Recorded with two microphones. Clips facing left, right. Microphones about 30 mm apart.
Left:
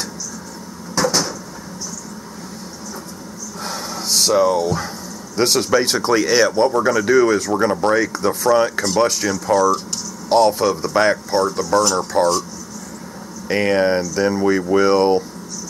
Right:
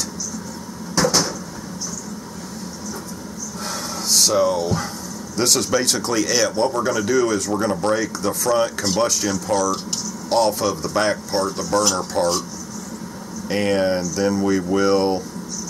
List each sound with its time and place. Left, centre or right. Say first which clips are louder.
0.9 s cupboard open or close: even; centre
3.6 s a sound: left 1 dB; centre
5.3 s speech: left 3 dB; centre
7.1 s speech: left 5 dB; centre
9.2 s speech: left 4 dB; centre
13.5 s speech: left 3 dB; centre